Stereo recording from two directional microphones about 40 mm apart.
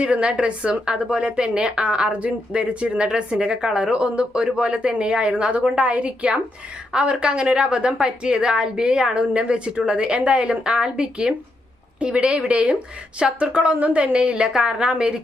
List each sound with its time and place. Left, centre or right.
0.0 s speech: right
13.7 s a woman's voice: right
14.0 s speech: right